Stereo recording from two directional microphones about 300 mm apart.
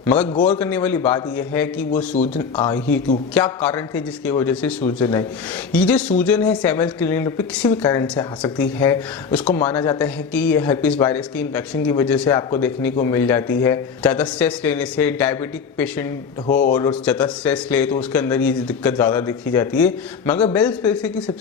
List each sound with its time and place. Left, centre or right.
0.6 s speech: centre